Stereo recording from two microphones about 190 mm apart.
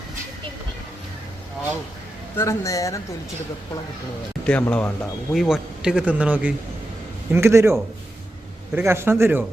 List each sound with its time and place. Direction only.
2.3 s a woman's voice: 15° left (ahead or behind)
4.4 s a woman's voice: 5° left (ahead or behind); by 9.4 s 10° right (ahead or behind)